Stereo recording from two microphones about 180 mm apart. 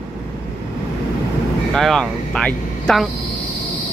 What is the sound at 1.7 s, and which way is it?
Speech, centre (ahead or behind).